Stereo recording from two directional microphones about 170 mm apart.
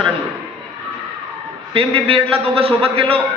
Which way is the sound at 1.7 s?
35° right (ahead or behind).